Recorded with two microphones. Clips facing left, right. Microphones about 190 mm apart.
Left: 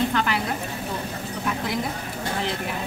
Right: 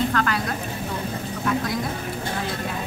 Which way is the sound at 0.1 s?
20° left (ahead or behind).